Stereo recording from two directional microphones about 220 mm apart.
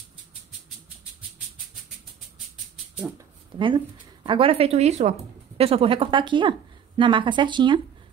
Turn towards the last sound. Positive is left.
turn(degrees=-20)  # may be behind; listen again after turning